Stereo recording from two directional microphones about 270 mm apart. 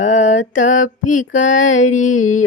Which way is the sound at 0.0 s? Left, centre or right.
Left.